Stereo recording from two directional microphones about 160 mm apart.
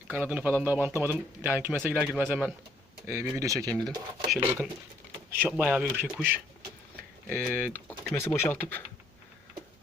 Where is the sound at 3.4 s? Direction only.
20° right (ahead or behind).